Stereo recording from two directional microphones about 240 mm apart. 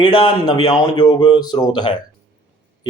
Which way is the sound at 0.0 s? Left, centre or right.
Centre.